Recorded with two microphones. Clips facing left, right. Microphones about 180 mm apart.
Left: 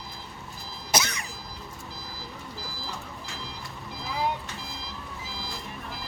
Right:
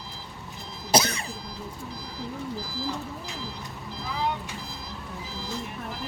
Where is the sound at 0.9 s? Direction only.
30° right (ahead or behind).